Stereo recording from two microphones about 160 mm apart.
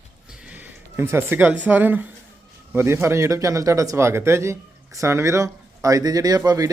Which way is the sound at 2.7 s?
15° right (ahead or behind).